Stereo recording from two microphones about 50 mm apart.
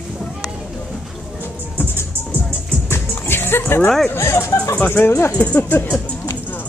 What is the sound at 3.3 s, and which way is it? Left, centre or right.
Music, left.